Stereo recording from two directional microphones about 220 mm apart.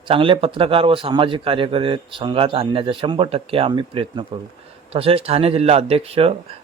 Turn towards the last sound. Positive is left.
turn(degrees=-25)  # may be behind; listen again after turning